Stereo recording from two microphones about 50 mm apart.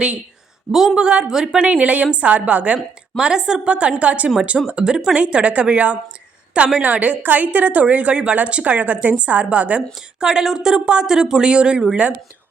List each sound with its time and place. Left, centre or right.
0.7 s speech: centre
0.9 s speech: centre
1.5 s a woman's voice: right
2.7 s a woman's voice: centre
5.1 s a woman's voice: right
10.2 s speech: centre